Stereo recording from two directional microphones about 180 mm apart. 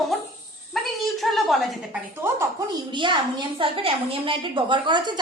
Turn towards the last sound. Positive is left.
turn(degrees=-25)  # may be behind; listen again after turning